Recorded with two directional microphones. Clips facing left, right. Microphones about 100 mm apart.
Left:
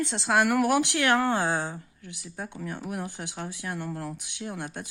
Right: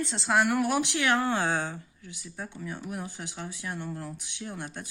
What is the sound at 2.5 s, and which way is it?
Speech, 60° left (ahead or behind).